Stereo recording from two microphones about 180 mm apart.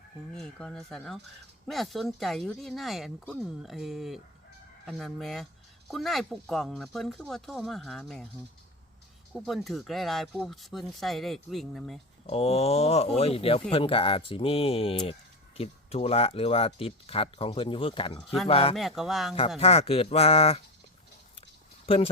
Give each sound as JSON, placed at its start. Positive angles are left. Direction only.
{"t": 0.3, "sound": "speech", "side_deg": 5}
{"t": 9.3, "sound": "speech", "side_deg": 0}
{"t": 12.2, "sound": "speech", "side_deg": 35}
{"t": 18.8, "sound": "speech", "side_deg": 0}
{"t": 19.5, "sound": "speech", "side_deg": 35}